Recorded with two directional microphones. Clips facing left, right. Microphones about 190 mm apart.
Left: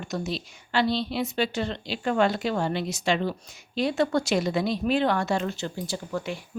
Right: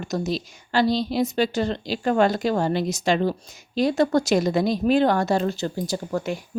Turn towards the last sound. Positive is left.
turn(degrees=-45)  # may be behind; listen again after turning